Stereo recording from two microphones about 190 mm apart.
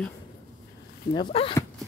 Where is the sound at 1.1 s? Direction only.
25° left (ahead or behind).